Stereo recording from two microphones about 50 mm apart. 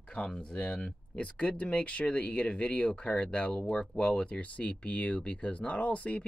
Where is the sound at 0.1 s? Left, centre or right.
Centre.